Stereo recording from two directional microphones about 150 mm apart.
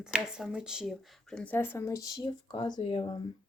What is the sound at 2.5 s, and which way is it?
Speech, 35° left (ahead or behind).